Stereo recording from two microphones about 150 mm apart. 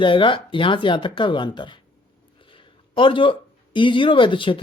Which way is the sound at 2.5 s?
35° left (ahead or behind).